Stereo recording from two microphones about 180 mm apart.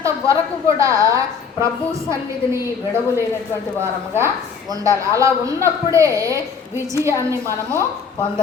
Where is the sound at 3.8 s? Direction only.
15° right (ahead or behind).